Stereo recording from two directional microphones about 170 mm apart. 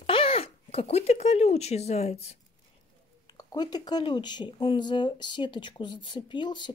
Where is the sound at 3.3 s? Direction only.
25° left (ahead or behind).